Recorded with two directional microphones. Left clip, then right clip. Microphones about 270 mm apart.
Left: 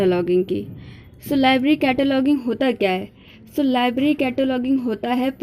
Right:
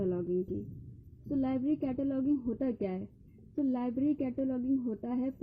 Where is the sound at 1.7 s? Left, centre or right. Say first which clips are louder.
Left 15 dB; left.